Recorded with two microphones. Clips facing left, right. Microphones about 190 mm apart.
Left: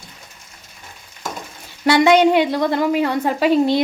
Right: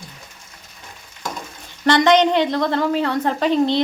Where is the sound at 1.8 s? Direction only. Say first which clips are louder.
Left 2 dB; 10° left (ahead or behind).